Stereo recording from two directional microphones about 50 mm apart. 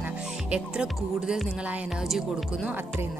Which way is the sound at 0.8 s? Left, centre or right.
Centre.